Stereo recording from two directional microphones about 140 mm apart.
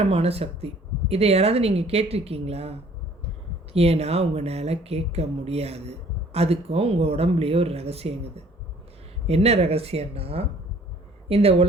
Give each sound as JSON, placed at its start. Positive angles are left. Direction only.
{"t": 0.0, "sound": "speech", "side_deg": -45}